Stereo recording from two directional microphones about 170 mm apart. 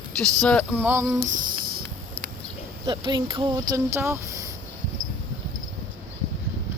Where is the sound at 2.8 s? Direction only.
25° right (ahead or behind).